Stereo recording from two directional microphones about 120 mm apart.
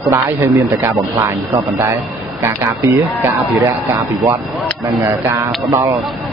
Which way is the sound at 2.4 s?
25° right (ahead or behind).